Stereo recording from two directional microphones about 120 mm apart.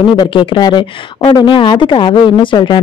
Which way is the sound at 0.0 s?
45° left (ahead or behind).